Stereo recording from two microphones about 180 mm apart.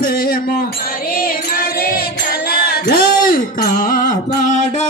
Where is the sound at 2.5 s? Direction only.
60° left (ahead or behind).